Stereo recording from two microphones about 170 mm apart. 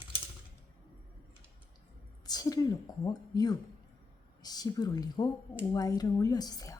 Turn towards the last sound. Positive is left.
turn(degrees=20)  # may be behind; listen again after turning